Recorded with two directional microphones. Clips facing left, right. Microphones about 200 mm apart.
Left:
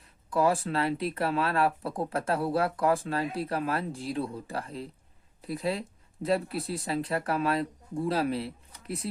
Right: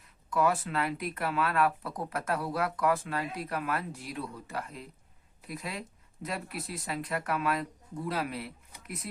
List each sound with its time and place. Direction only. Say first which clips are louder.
0.3 s speech: left 3 dB; 30° left (ahead or behind)